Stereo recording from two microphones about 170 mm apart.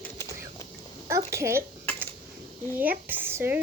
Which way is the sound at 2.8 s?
10° right (ahead or behind).